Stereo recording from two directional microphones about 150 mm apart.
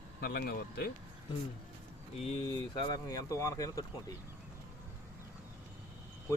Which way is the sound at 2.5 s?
25° left (ahead or behind).